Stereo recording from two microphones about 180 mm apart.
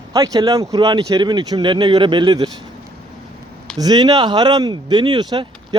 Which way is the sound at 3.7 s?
20° right (ahead or behind).